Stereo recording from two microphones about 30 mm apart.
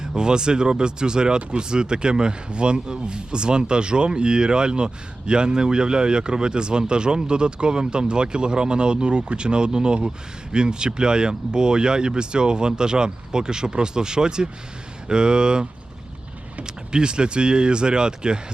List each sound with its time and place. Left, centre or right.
0.2 s speech: right
16.6 s speech: right